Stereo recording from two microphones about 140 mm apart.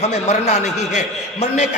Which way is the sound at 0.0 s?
50° left (ahead or behind).